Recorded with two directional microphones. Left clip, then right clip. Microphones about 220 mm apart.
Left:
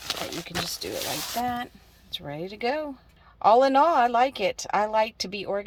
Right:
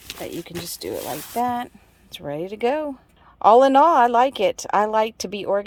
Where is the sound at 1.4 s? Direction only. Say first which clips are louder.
Right 5 dB; 20° right (ahead or behind).